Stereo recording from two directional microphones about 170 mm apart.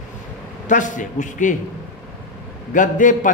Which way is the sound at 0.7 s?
50° left (ahead or behind).